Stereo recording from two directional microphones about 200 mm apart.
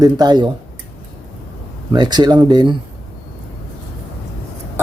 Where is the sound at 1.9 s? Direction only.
20° right (ahead or behind).